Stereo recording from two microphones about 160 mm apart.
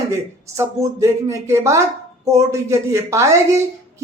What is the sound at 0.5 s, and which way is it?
Speech, 20° right (ahead or behind).